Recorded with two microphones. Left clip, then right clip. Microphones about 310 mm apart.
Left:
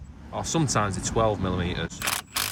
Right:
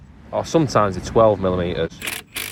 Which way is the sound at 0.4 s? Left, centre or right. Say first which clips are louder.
Right 8 dB; centre.